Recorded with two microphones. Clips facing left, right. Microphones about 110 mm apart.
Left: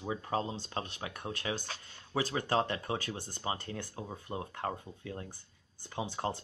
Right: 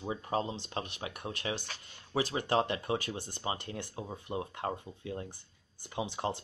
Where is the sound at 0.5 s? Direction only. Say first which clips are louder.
Even; 40° left (ahead or behind).